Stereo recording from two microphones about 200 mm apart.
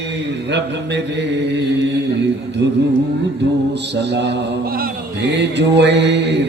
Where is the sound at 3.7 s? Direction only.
60° right (ahead or behind).